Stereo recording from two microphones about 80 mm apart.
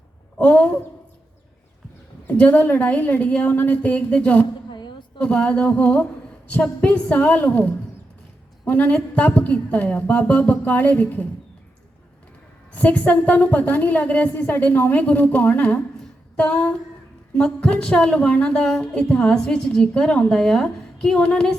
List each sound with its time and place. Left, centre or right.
0.3 s speech: centre
2.2 s a woman's voice: centre
4.7 s a sound: left
5.2 s a woman's voice: centre
12.7 s a woman's voice: centre